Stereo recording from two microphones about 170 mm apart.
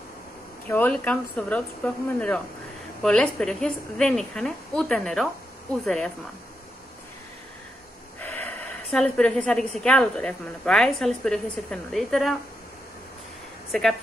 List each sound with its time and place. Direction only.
0.7 s a woman's voice: 10° left (ahead or behind)
8.2 s a woman's voice: 10° left (ahead or behind)
13.7 s speech: 5° left (ahead or behind)